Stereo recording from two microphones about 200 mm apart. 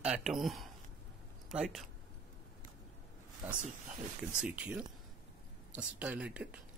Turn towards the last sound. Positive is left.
turn(degrees=-5)  # may be behind; listen again after turning